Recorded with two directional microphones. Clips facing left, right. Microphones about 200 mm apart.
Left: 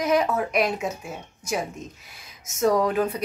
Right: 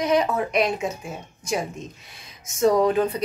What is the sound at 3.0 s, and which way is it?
Speech, 5° left (ahead or behind).